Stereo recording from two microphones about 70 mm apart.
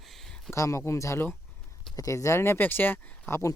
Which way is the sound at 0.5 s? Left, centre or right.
Left.